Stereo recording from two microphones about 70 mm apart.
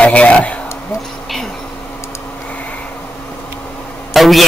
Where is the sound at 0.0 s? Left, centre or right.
Centre.